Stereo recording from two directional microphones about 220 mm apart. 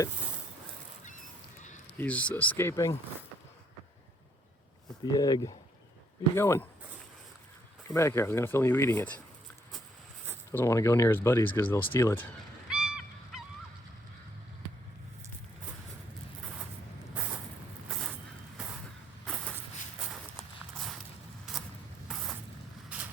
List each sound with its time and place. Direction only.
2.0 s speech: 5° left (ahead or behind)
5.1 s speech: 15° left (ahead or behind)
7.9 s speech: 15° left (ahead or behind)
10.5 s speech: 10° left (ahead or behind)
12.6 s goose: 5° right (ahead or behind)
18.5 s vehicle: 5° right (ahead or behind)
19.2 s a sound: centre (ahead or behind)
19.5 s shuffle: 5° right (ahead or behind)
21.5 s a sound: centre (ahead or behind)
22.1 s vehicle: centre (ahead or behind)